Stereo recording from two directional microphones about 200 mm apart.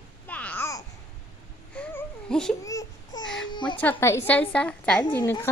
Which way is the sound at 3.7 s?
10° left (ahead or behind).